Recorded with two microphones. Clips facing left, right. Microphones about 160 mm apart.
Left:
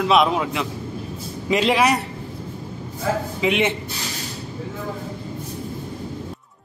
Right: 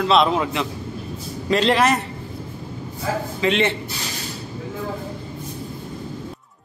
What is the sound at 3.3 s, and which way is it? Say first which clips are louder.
Speech: right 2 dB; 15° left (ahead or behind).